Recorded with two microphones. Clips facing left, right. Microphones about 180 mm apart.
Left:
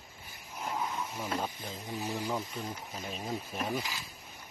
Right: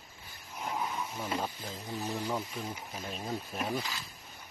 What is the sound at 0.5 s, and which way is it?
Snake, centre (ahead or behind).